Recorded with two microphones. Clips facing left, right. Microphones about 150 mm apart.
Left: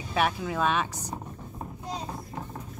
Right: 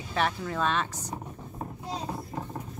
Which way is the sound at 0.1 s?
10° left (ahead or behind).